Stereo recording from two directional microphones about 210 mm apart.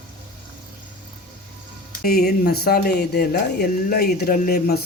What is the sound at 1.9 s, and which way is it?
Speech, 45° left (ahead or behind).